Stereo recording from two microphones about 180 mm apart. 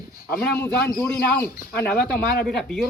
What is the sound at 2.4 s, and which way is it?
Speech, centre (ahead or behind).